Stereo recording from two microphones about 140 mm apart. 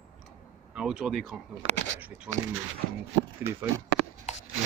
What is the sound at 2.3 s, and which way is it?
Speech, 20° right (ahead or behind).